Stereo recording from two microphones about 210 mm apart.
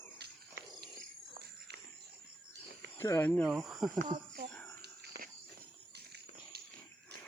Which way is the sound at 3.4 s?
Centre (ahead or behind).